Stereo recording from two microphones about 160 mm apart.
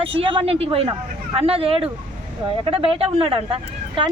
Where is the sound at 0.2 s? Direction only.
35° right (ahead or behind).